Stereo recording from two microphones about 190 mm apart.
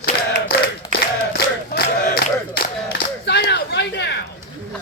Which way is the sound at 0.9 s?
55° left (ahead or behind).